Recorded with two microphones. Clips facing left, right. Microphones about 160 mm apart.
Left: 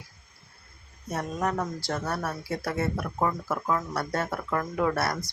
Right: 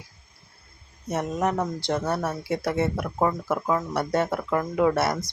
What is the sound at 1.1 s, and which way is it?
Speech, 20° right (ahead or behind).